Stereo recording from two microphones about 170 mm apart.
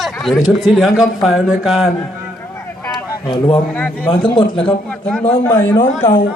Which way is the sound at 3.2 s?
25° left (ahead or behind).